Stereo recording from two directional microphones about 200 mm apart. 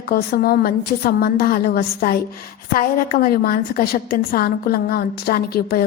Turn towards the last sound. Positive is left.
turn(degrees=50)  # may be behind; listen again after turning